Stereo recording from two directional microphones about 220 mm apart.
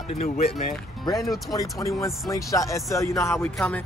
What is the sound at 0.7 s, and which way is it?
Speech, 20° left (ahead or behind).